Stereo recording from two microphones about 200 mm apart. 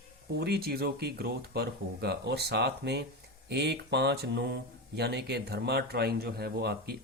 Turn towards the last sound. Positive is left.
turn(degrees=-55)  # may be behind; listen again after turning